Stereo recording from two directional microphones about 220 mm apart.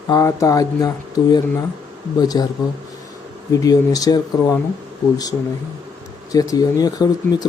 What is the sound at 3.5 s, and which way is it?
Speech, 15° left (ahead or behind).